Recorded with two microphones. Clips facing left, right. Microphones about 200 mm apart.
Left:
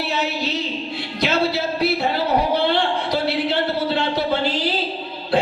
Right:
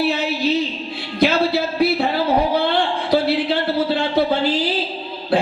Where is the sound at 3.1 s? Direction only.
55° right (ahead or behind).